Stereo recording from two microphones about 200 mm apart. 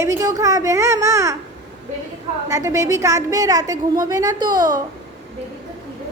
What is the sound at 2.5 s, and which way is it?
A woman's voice, 15° right (ahead or behind).